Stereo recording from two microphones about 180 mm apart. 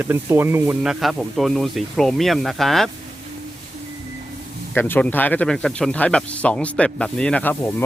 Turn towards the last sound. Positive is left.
turn(degrees=10)  # may be behind; listen again after turning